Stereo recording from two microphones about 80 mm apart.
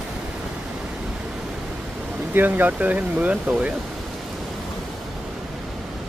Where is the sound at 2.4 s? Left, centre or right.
Right.